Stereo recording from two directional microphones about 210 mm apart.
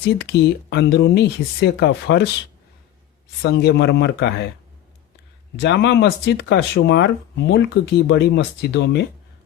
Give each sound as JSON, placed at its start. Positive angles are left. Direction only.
{"t": 0.0, "sound": "speech", "side_deg": 55}
{"t": 3.4, "sound": "speech", "side_deg": 55}
{"t": 5.5, "sound": "speech", "side_deg": 55}